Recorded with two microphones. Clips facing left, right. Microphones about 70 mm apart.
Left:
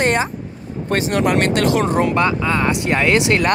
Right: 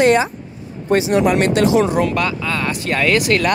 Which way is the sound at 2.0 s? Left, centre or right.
Left.